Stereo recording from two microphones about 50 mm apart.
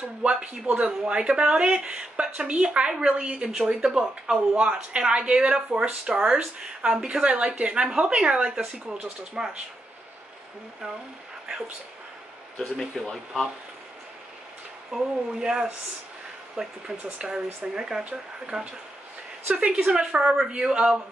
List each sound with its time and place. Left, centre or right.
0.2 s speech: right
12.5 s speech: centre
14.9 s speech: centre